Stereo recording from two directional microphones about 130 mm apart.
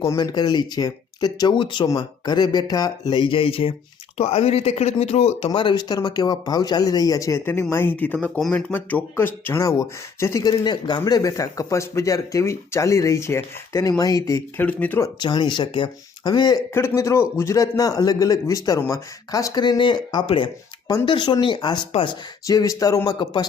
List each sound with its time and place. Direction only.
0.2 s speech: 35° left (ahead or behind); by 5.5 s 55° left (ahead or behind)
5.5 s speech: 35° left (ahead or behind); by 15.1 s 15° left (ahead or behind)
15.2 s speech: 35° left (ahead or behind)
16.7 s speech: 20° left (ahead or behind); by 22.2 s 40° left (ahead or behind)
22.4 s speech: 25° left (ahead or behind)
23.2 s speech: 35° left (ahead or behind)